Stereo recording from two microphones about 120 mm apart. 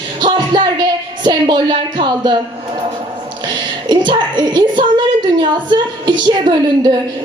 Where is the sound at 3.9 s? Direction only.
40° right (ahead or behind).